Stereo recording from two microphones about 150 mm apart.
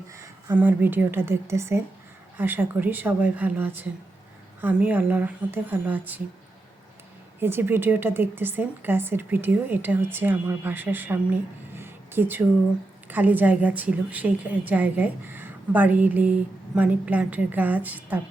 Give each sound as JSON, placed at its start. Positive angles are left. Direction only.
{"t": 0.1, "sound": "a woman's voice", "side_deg": -20}
{"t": 7.3, "sound": "speech", "side_deg": -15}